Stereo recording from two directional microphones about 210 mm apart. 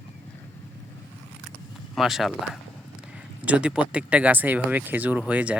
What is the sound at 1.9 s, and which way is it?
Speech, centre (ahead or behind).